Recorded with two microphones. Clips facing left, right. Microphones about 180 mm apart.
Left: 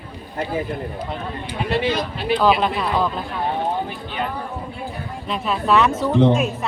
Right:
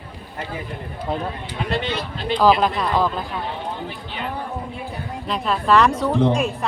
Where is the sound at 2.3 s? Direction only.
5° left (ahead or behind).